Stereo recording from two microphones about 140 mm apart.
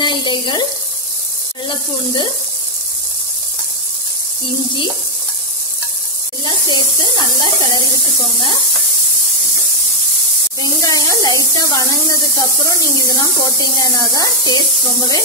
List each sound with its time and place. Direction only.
0.0 s speech: 35° left (ahead or behind)
6.4 s speech: 30° left (ahead or behind)
10.6 s speech: 25° left (ahead or behind)